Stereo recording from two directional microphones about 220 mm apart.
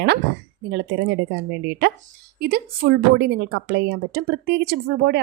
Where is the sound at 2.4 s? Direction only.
45° right (ahead or behind).